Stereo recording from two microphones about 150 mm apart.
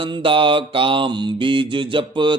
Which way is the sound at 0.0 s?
35° right (ahead or behind).